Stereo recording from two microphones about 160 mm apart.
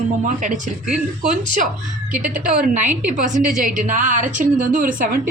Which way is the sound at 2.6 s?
50° right (ahead or behind).